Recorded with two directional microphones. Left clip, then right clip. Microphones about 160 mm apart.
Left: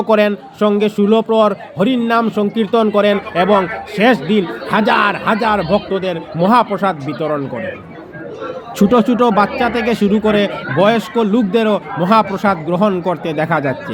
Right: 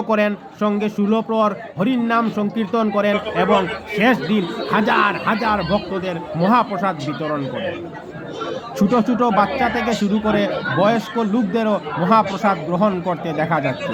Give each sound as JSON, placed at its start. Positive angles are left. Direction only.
{"t": 0.1, "sound": "a man's voice", "side_deg": 20}
{"t": 8.8, "sound": "a man's voice", "side_deg": 30}